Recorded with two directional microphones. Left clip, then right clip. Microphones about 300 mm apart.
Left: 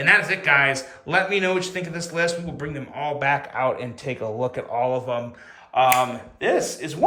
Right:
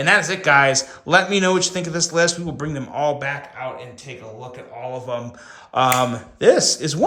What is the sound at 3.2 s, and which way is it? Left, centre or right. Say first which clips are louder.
Speech: left 5 dB; centre.